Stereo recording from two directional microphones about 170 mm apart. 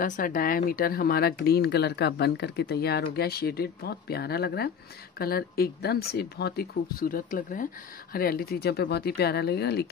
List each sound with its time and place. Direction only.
0.0 s speech: 50° left (ahead or behind); by 9.8 s 75° left (ahead or behind)